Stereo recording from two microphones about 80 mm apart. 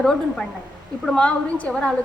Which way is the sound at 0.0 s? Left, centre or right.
Centre.